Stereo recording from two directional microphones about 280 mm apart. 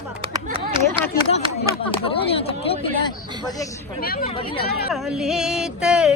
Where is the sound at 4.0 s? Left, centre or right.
Left.